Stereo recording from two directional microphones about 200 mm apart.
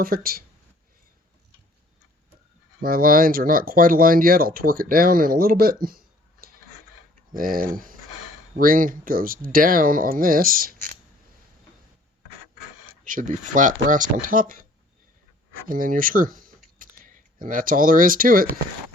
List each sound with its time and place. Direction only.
0.0 s speech: 50° right (ahead or behind)
2.8 s speech: 45° right (ahead or behind)
13.1 s speech: 40° right (ahead or behind)
16.7 s a sound: 45° right (ahead or behind)